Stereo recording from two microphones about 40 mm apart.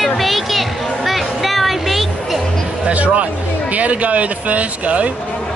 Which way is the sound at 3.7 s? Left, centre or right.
Right.